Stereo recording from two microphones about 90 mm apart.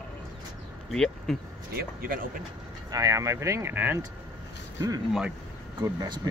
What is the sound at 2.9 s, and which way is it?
Speech, 40° right (ahead or behind).